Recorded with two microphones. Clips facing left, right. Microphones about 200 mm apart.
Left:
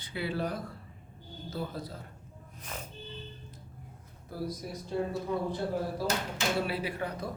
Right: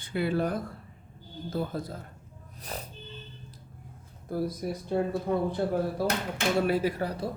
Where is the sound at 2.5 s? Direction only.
35° right (ahead or behind).